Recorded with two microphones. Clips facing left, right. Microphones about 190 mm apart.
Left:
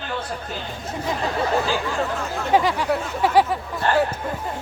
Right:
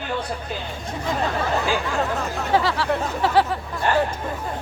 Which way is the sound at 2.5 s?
15° left (ahead or behind).